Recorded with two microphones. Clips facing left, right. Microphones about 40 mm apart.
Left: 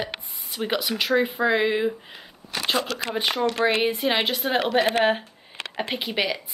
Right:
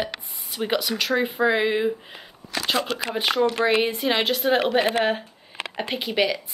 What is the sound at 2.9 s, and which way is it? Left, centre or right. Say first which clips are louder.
Speech: right 2 dB; right.